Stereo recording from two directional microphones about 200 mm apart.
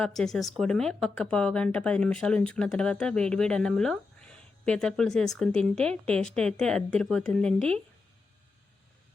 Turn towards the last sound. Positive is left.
turn(degrees=5)  # may be behind; listen again after turning